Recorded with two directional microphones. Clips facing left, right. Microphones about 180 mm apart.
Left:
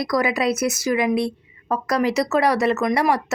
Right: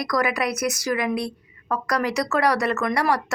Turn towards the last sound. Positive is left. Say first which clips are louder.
# left 3 dB
turn(degrees=20)  # may be behind; listen again after turning